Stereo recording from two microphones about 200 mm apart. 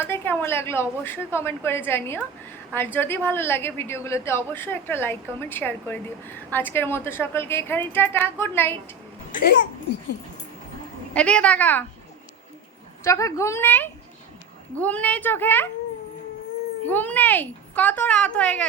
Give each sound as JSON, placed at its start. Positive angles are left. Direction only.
{"t": 0.0, "sound": "a woman's voice", "side_deg": 10}
{"t": 9.3, "sound": "a child's voice", "side_deg": 50}
{"t": 11.1, "sound": "a woman's voice", "side_deg": 5}
{"t": 13.1, "sound": "a woman's voice", "side_deg": 15}
{"t": 16.8, "sound": "a woman's voice", "side_deg": 10}